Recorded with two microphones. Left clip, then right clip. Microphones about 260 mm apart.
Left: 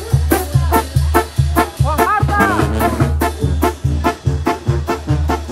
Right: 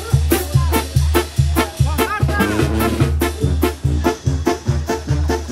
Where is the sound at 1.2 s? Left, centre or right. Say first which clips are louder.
Left 4 dB; centre.